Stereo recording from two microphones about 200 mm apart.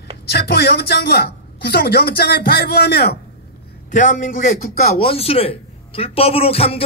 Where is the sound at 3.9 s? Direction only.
40° left (ahead or behind).